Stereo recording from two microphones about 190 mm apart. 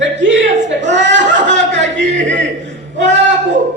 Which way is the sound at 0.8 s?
70° right (ahead or behind).